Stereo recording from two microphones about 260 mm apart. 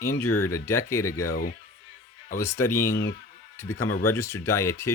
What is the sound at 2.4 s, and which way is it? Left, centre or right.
Speech, centre.